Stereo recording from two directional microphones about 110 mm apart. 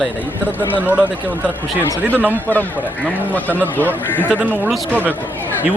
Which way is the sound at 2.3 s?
15° left (ahead or behind).